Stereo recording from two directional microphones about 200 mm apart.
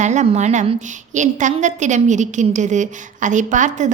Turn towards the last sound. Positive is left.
turn(degrees=-40)  # may be behind; listen again after turning